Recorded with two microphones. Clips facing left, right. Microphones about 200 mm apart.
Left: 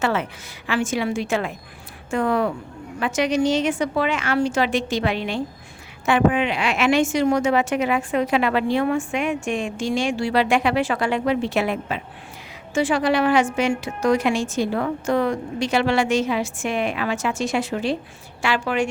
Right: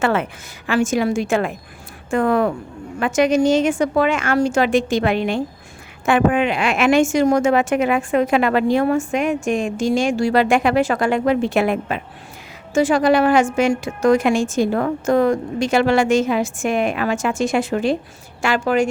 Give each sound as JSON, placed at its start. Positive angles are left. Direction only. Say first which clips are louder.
{"t": 0.0, "sound": "a woman's voice", "louder": "right 4 dB", "side_deg": -55}
{"t": 0.7, "sound": "a woman's voice", "louder": "right 5 dB", "side_deg": -45}